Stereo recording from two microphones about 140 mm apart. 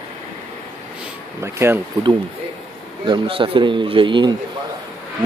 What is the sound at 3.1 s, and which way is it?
Speech, 40° right (ahead or behind).